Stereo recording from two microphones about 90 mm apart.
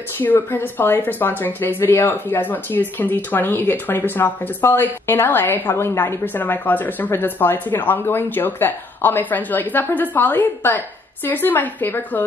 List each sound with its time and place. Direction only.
0.2 s speech: 20° left (ahead or behind)